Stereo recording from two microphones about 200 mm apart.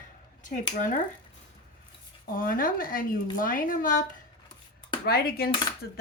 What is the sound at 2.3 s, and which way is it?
Speech, 45° left (ahead or behind).